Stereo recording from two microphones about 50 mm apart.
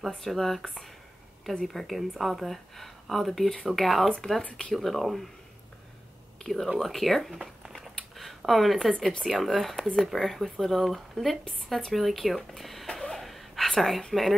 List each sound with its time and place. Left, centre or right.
0.0 s speech: centre
4.4 s speech: centre
4.7 s speech: centre
6.4 s speech: centre
8.2 s a sound: centre
9.3 s speech: centre
13.2 s a sound: centre